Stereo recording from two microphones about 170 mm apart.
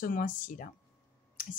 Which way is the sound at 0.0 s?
55° left (ahead or behind).